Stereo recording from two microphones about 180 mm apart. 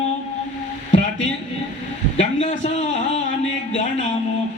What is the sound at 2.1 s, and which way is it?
A man's voice, 40° left (ahead or behind).